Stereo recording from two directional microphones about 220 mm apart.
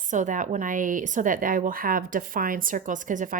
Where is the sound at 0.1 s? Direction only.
35° right (ahead or behind).